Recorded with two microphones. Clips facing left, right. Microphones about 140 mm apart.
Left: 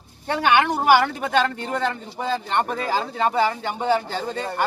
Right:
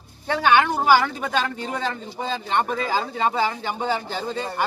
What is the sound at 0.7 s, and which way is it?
Speech, 65° left (ahead or behind).